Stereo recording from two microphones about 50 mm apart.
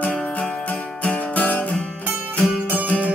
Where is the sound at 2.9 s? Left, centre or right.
Left.